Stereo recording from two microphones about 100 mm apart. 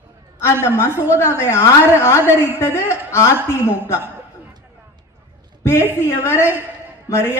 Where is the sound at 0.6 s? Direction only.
25° left (ahead or behind).